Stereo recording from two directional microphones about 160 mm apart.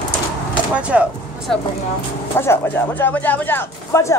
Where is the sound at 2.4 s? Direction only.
15° left (ahead or behind).